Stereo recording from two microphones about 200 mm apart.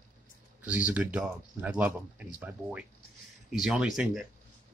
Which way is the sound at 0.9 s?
5° right (ahead or behind).